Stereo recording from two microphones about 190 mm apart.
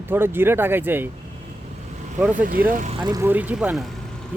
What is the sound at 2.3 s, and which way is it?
Speech, 45° right (ahead or behind).